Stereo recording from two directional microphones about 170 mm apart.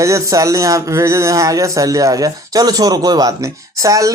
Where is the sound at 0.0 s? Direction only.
20° right (ahead or behind).